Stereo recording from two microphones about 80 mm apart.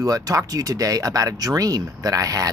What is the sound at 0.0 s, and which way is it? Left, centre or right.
Speech, right.